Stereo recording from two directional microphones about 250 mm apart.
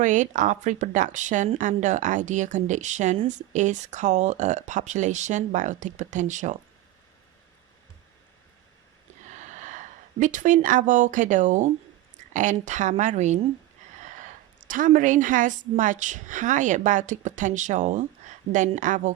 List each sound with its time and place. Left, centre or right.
0.0 s a woman's voice: right
9.2 s a woman's voice: right
14.7 s a woman's voice: right